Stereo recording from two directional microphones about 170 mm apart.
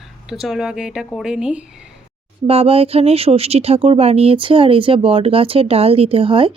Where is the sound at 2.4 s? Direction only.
35° right (ahead or behind).